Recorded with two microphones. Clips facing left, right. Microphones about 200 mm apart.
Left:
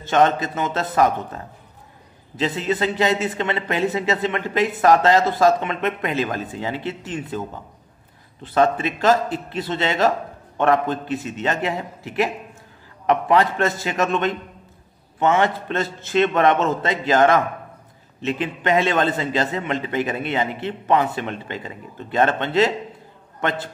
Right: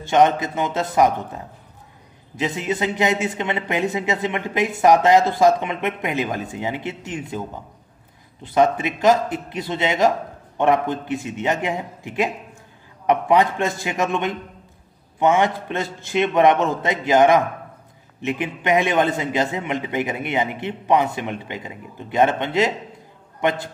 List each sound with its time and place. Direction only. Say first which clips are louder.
0.1 s a man's voice: right 1 dB; 15° right (ahead or behind)
8.5 s a man's voice: right 1 dB; 15° right (ahead or behind)